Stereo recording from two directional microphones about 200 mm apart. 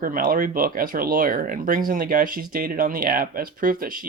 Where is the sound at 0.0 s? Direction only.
45° right (ahead or behind).